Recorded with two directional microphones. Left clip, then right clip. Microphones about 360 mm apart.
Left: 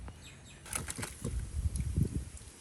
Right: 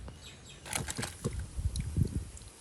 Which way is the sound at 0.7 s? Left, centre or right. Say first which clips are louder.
Right 4 dB; centre.